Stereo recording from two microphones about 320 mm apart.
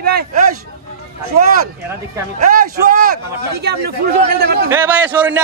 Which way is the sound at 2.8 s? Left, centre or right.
Right.